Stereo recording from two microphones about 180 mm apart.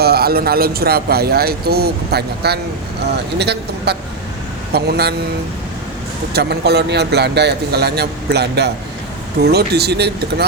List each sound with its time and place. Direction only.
0.0 s speech: 60° right (ahead or behind)
6.3 s speech: 65° right (ahead or behind)